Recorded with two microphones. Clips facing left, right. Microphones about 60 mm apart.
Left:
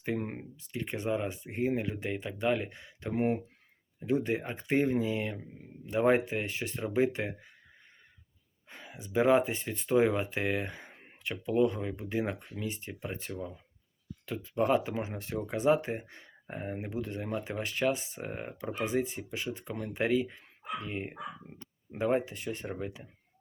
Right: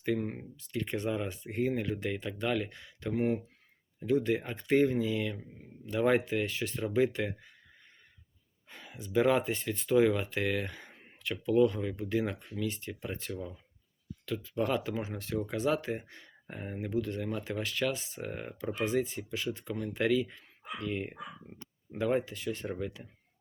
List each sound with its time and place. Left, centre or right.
0.0 s speech: left
8.7 s speech: centre